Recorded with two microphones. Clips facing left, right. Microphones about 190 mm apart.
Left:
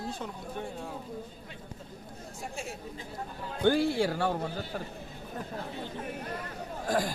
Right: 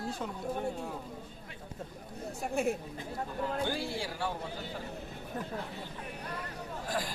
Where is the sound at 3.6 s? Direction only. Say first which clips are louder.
Left 10 dB; 60° left (ahead or behind).